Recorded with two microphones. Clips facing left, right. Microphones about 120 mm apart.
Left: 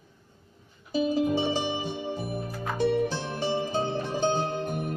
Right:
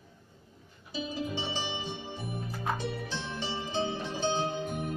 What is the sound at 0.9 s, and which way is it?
Music, 45° left (ahead or behind).